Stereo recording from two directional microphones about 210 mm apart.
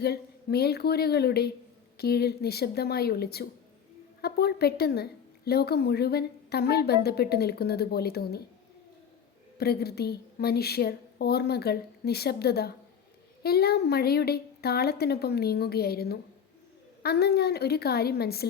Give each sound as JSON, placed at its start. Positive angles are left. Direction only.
{"t": 0.0, "sound": "a woman's voice", "side_deg": 50}
{"t": 9.6, "sound": "a woman's voice", "side_deg": 50}